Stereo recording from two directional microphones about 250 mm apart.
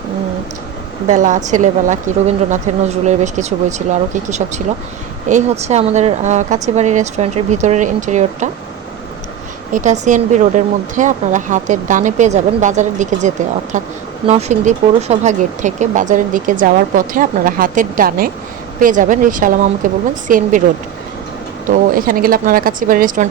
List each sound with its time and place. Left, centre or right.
1.0 s speech: right
9.7 s speech: right
21.9 s speech: right